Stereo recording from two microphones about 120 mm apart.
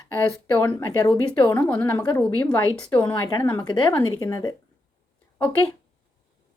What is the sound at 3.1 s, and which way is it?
A woman's voice, 35° left (ahead or behind).